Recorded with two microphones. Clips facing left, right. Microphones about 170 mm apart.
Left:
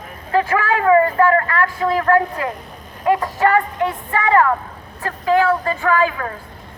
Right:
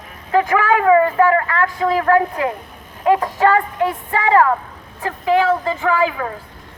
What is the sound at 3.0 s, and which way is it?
Speech, 20° right (ahead or behind).